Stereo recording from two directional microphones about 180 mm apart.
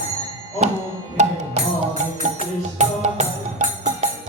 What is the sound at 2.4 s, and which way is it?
Music, 40° right (ahead or behind).